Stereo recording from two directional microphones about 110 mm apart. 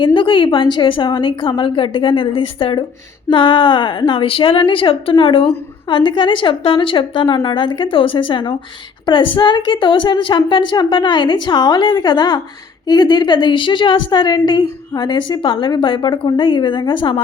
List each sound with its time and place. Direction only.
0.0 s a woman's voice: 50° left (ahead or behind)